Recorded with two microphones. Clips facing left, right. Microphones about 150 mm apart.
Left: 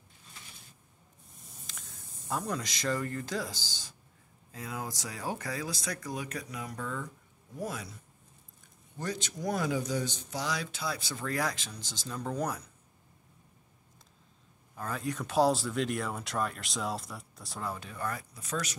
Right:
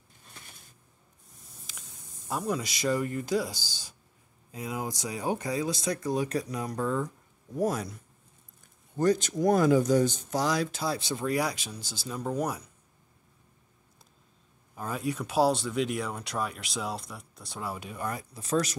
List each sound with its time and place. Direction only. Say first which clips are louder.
1.7 s speech: right 1 dB; 5° right (ahead or behind); by 7.9 s 45° right (ahead or behind)
8.9 s speech: right 12 dB; 45° right (ahead or behind)
11.1 s speech: right 4 dB; 15° right (ahead or behind)
14.8 s speech: right 3 dB; 15° right (ahead or behind)
18.3 s speech: right 8 dB; 35° right (ahead or behind)